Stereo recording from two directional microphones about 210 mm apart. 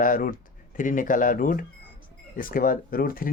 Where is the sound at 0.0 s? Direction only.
40° left (ahead or behind).